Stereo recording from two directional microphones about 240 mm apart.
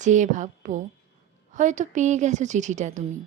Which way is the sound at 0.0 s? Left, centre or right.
Right.